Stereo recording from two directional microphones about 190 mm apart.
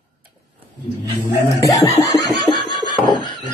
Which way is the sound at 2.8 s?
25° left (ahead or behind).